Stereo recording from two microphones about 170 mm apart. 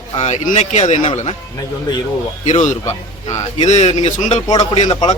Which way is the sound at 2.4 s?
45° left (ahead or behind).